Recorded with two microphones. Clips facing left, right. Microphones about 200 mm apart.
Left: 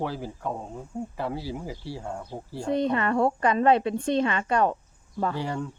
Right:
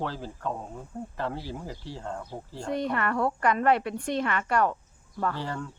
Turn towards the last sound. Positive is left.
turn(degrees=15)  # may be behind; listen again after turning